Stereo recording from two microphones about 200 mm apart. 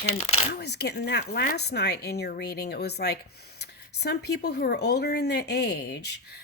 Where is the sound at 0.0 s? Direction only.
35° left (ahead or behind).